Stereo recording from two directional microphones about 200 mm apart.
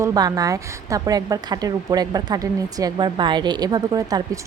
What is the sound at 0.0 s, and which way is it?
A woman's voice, 20° right (ahead or behind).